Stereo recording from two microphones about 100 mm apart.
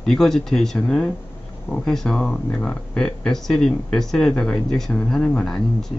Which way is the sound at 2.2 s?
15° left (ahead or behind).